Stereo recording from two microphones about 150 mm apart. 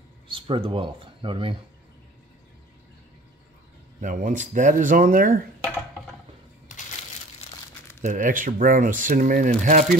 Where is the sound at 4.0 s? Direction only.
60° right (ahead or behind).